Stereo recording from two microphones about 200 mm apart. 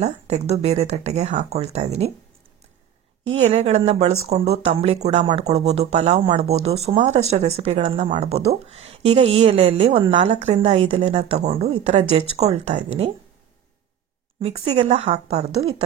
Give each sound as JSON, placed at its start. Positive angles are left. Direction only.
{"t": 0.0, "sound": "speech", "side_deg": -30}
{"t": 3.4, "sound": "a woman's voice", "side_deg": -30}
{"t": 14.4, "sound": "a woman's voice", "side_deg": -30}